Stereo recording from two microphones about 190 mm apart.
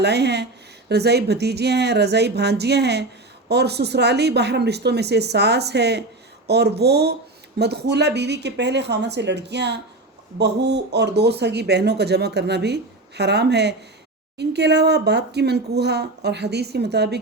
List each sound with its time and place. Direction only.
0.0 s speech: 60° right (ahead or behind)